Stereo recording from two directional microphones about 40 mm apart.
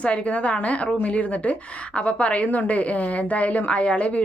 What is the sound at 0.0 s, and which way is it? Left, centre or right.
A woman's voice, left.